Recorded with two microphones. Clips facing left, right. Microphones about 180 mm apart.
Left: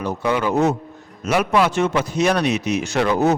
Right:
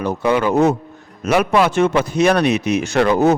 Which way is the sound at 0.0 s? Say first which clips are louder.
Right 4 dB; 60° right (ahead or behind).